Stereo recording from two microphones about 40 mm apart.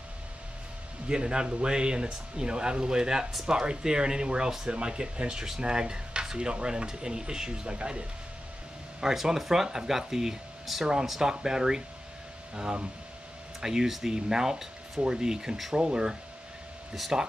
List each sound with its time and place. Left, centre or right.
1.0 s speech: right
9.0 s speech: centre
16.9 s speech: centre